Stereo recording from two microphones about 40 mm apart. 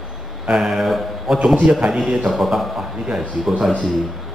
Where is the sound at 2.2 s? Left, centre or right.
Centre.